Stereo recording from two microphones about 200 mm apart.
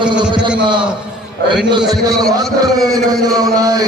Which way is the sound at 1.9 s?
20° right (ahead or behind).